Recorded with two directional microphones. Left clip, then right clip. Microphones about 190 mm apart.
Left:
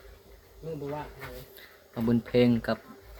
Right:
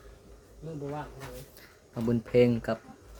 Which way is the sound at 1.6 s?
10° right (ahead or behind).